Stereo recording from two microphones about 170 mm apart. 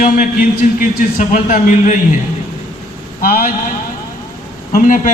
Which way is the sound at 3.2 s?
60° left (ahead or behind).